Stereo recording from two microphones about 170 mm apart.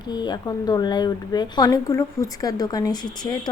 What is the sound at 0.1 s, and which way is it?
Speech, 25° left (ahead or behind).